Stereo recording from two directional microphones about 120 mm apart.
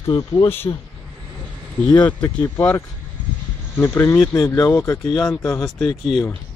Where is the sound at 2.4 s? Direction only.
15° left (ahead or behind).